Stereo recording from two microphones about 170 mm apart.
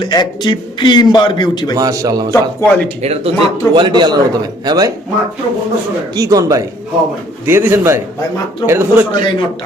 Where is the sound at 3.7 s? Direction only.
25° right (ahead or behind).